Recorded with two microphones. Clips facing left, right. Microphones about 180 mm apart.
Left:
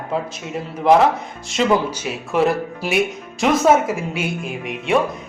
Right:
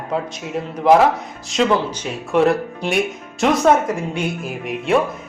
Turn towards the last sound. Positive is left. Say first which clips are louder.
# right 2 dB
turn(degrees=0)  # may be behind; listen again after turning